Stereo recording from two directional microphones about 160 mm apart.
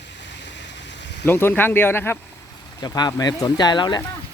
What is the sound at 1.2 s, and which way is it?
Speech, 10° left (ahead or behind).